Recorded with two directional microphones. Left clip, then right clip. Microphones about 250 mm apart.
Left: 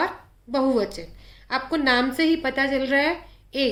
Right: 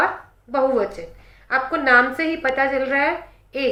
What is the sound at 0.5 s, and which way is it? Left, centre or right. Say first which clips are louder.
A woman's voice: right 3 dB; left.